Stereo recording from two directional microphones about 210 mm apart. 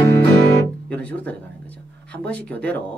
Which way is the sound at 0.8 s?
5° left (ahead or behind).